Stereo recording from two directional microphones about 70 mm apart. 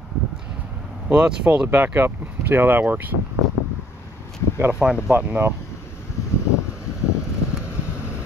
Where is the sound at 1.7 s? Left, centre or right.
Right.